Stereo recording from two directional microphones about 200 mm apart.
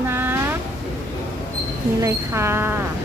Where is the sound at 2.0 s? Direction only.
15° right (ahead or behind).